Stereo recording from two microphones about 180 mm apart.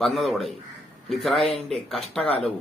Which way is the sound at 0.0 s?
Centre (ahead or behind).